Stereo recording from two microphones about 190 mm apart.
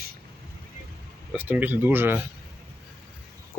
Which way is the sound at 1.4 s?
10° right (ahead or behind).